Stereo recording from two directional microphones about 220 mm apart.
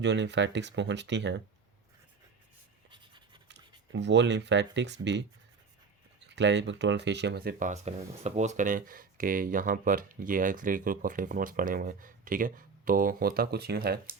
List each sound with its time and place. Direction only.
0.0 s speech: 55° right (ahead or behind)
3.5 s speech: 55° right (ahead or behind)